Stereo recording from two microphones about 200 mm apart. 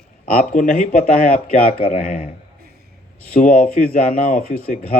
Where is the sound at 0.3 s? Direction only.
40° left (ahead or behind).